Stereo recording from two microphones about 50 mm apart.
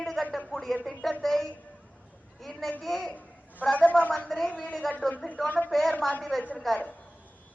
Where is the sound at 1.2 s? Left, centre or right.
Centre.